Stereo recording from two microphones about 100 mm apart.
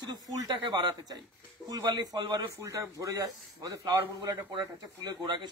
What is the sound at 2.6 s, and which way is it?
A man's voice, 30° right (ahead or behind).